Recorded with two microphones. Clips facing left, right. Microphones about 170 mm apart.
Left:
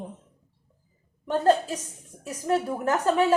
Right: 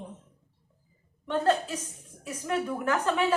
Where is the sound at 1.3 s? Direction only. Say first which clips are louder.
Left 4 dB; 40° left (ahead or behind).